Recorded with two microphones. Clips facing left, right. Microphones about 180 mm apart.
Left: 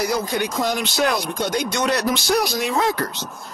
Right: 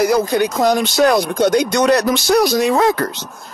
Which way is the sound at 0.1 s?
45° right (ahead or behind).